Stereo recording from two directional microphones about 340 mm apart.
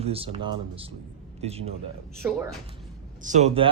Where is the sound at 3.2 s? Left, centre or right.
Centre.